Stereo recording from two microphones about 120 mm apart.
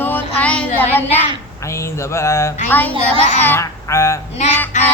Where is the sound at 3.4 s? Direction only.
20° left (ahead or behind).